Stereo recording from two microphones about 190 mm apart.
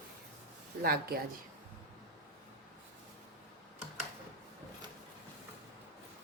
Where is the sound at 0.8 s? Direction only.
50° right (ahead or behind).